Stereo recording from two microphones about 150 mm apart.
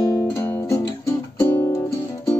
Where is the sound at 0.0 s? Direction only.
25° left (ahead or behind).